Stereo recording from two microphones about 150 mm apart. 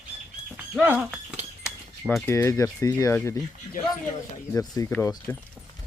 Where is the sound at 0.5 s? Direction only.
10° right (ahead or behind).